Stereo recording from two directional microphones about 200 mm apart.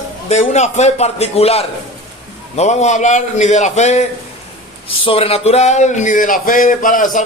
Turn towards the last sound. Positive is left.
turn(degrees=40)  # may be behind; listen again after turning